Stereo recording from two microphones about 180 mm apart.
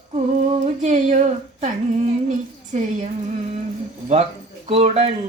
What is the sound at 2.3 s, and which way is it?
Speech, 40° right (ahead or behind).